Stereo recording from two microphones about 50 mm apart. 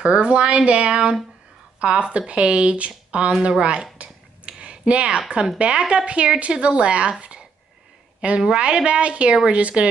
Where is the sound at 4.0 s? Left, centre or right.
Right.